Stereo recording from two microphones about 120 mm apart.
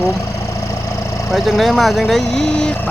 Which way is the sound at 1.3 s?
Centre (ahead or behind).